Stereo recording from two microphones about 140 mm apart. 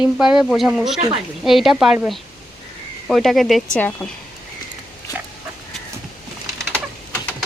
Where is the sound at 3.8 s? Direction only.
10° left (ahead or behind).